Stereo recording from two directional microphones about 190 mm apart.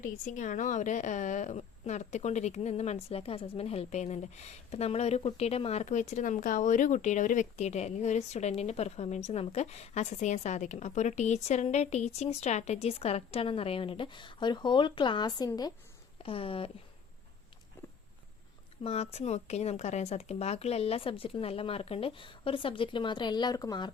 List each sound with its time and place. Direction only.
0.0 s a woman's voice: 40° left (ahead or behind)
18.8 s speech: 35° left (ahead or behind)